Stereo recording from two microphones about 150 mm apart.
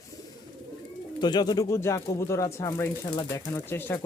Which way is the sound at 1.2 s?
30° left (ahead or behind).